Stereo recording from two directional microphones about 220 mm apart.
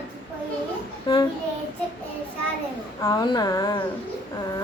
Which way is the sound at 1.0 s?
20° left (ahead or behind).